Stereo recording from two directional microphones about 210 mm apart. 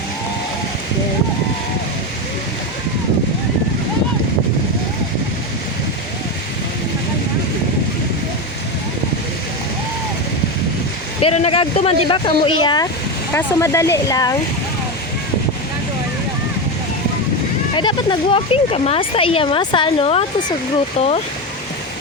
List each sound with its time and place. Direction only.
11.2 s speech: 30° left (ahead or behind)
17.7 s speech: 20° left (ahead or behind)